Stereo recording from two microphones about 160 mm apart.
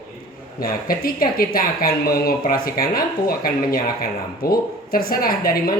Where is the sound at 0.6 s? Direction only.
65° left (ahead or behind).